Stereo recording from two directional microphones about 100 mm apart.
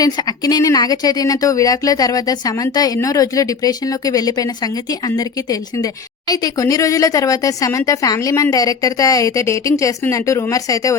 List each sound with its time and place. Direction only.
0.0 s speech: 40° left (ahead or behind)